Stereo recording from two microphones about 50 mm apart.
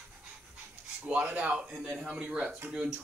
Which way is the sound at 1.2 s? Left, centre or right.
Right.